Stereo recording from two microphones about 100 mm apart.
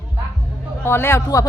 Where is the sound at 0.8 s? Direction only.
25° left (ahead or behind).